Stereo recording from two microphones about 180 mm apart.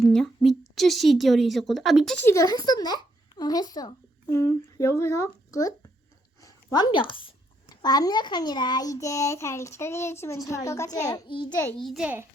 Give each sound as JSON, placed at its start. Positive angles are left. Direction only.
{"t": 0.0, "sound": "a sound", "side_deg": 0}
{"t": 0.8, "sound": "a woman's voice", "side_deg": 0}
{"t": 2.2, "sound": "a child's voice", "side_deg": 20}
{"t": 11.8, "sound": "a woman's voice", "side_deg": 0}